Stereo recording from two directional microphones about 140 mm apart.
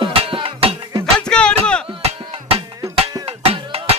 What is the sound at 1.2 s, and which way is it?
Music, 5° left (ahead or behind).